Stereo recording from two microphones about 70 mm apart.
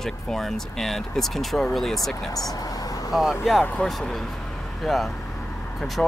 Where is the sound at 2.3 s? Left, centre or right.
Left.